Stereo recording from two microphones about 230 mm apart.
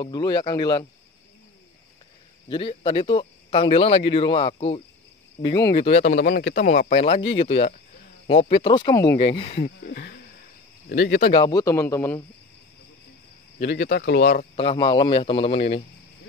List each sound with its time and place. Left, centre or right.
0.0 s a man's voice: centre
2.4 s a man's voice: left
6.0 s speech: left
9.8 s speech: left
11.3 s a man's voice: centre
13.6 s speech: left